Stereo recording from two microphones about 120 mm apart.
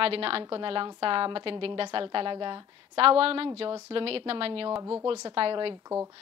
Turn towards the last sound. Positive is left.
turn(degrees=-50)  # may be behind; listen again after turning